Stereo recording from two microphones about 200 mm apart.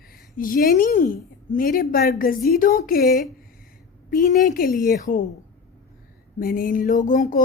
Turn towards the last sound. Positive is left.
turn(degrees=40)  # may be behind; listen again after turning